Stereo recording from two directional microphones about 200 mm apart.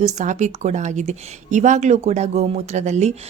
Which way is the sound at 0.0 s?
35° right (ahead or behind).